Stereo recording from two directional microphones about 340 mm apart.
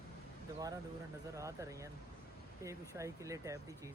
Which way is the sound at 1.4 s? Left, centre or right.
Centre.